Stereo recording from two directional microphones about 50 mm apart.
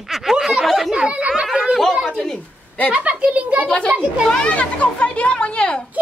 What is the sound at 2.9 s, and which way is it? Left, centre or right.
Speech, right.